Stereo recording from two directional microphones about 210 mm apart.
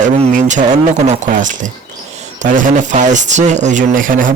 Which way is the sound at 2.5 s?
35° right (ahead or behind).